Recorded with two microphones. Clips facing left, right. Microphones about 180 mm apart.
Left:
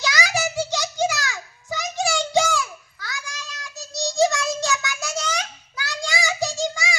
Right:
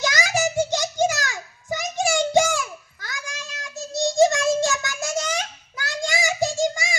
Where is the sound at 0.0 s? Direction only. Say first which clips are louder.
Right 2 dB; 50° right (ahead or behind).